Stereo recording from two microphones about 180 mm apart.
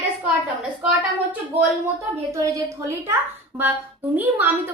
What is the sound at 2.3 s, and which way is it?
A woman's voice, 15° right (ahead or behind).